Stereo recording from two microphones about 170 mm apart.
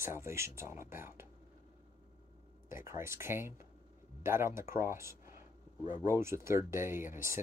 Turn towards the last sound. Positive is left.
turn(degrees=-15)  # may be behind; listen again after turning